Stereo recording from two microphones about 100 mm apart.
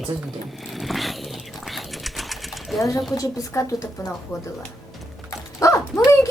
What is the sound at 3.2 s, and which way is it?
Speech, 30° left (ahead or behind).